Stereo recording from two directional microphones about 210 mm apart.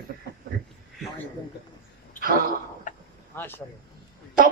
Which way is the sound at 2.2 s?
45° right (ahead or behind).